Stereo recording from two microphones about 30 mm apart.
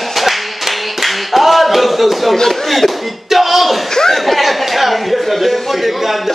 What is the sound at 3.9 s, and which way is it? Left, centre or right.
Speech, centre.